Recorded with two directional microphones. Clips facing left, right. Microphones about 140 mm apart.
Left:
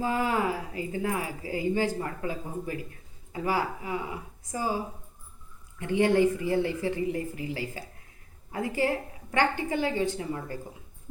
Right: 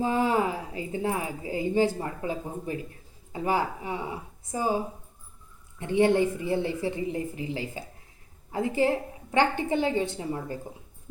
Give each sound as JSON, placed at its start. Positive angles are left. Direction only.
{"t": 0.0, "sound": "a woman's voice", "side_deg": -20}
{"t": 5.8, "sound": "a woman's voice", "side_deg": -20}